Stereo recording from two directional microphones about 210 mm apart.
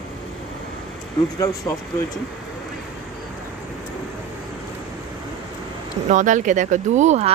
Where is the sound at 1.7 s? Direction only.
15° left (ahead or behind).